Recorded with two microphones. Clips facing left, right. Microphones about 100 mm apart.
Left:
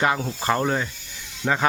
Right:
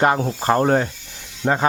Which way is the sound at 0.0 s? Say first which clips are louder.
Right 5 dB; 45° right (ahead or behind).